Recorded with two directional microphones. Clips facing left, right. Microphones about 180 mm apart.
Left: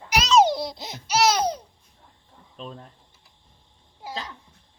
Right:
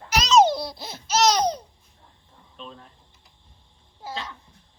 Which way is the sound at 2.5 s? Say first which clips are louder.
Left 3 dB; 40° left (ahead or behind).